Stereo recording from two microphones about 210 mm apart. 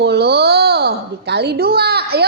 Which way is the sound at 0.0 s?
50° right (ahead or behind).